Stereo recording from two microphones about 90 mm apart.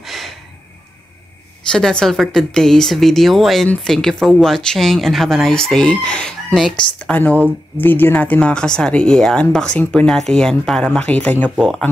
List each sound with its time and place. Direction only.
0.0 s snort: centre (ahead or behind)
1.7 s speech: 10° left (ahead or behind)